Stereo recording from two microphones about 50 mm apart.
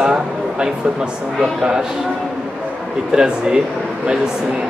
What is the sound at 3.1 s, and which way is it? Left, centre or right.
A man's voice, centre.